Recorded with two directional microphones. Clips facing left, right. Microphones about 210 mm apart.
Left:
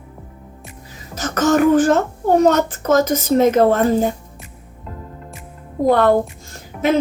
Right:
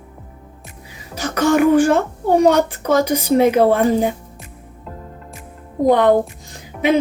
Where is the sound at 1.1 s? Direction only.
10° right (ahead or behind).